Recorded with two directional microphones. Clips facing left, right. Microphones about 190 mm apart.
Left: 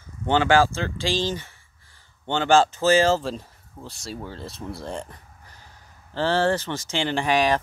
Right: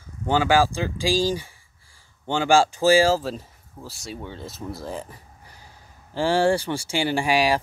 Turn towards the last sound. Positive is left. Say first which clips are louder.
# even
turn(degrees=-10)  # may be behind; listen again after turning